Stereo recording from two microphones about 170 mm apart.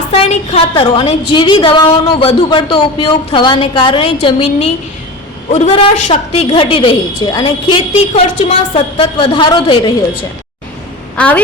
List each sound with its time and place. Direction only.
0.2 s a woman's voice: 35° left (ahead or behind)
5.5 s a woman's voice: 40° left (ahead or behind)
11.2 s a woman's voice: 10° left (ahead or behind)